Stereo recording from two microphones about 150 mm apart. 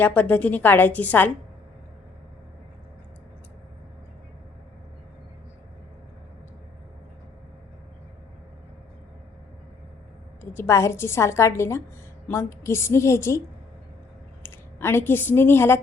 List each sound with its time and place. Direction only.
0.0 s a woman's voice: 10° left (ahead or behind)
10.5 s a woman's voice: 15° left (ahead or behind)
14.4 s a woman's voice: 15° left (ahead or behind)